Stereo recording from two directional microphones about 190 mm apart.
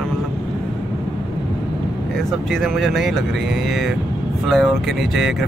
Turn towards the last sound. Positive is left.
turn(degrees=0)  # may be behind; listen again after turning